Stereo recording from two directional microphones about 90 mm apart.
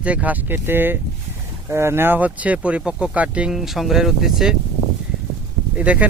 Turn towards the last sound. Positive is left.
turn(degrees=-15)  # may be behind; listen again after turning